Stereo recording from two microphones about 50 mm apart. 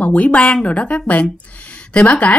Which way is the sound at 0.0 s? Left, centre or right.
Left.